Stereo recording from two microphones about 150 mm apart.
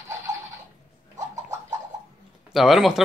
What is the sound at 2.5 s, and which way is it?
Speech, centre (ahead or behind).